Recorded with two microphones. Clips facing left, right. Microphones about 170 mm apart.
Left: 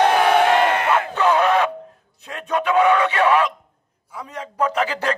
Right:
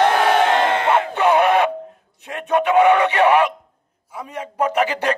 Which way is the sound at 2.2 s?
20° right (ahead or behind).